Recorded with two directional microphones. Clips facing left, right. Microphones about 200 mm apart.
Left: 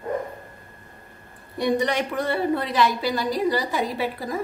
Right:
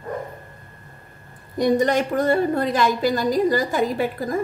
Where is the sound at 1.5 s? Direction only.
45° right (ahead or behind).